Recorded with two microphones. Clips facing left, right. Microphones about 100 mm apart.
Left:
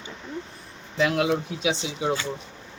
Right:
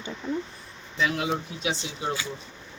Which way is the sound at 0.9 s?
90° left.